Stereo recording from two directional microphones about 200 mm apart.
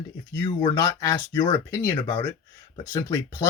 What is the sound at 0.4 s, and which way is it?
Speech, 20° left (ahead or behind).